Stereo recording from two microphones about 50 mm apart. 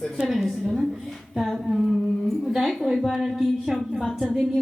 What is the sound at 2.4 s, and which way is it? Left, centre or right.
A woman's voice, centre.